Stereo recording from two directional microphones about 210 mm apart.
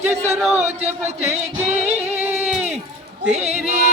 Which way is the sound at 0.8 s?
30° right (ahead or behind).